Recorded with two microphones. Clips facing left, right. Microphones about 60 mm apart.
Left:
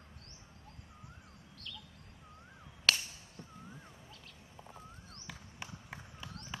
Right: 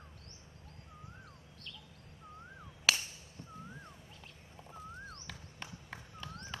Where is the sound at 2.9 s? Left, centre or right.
Centre.